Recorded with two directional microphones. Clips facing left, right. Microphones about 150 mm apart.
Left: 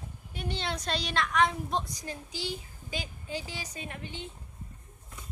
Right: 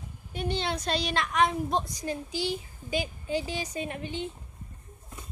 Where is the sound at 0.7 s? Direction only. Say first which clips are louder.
Right 3 dB; 5° right (ahead or behind).